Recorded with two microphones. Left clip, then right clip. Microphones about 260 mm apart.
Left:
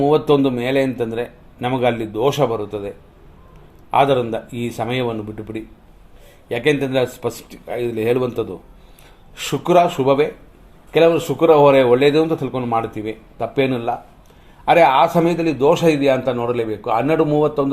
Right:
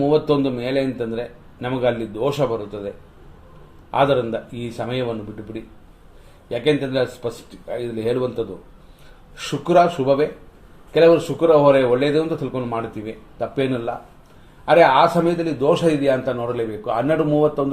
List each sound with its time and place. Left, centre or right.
0.0 s a man's voice: left
3.9 s a man's voice: left
6.5 s a man's voice: left